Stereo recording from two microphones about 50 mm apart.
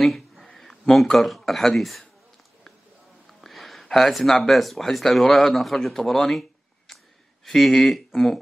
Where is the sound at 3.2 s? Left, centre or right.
Centre.